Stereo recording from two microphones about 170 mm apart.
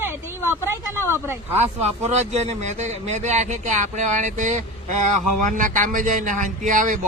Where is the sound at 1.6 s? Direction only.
40° right (ahead or behind).